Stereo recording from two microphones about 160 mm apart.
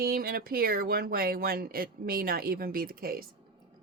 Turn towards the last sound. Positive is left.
turn(degrees=-65)  # may be behind; listen again after turning